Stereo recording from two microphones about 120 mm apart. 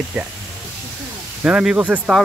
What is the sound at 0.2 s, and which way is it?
Speech, 15° right (ahead or behind).